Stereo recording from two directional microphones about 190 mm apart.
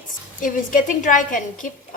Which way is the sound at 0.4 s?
45° left (ahead or behind).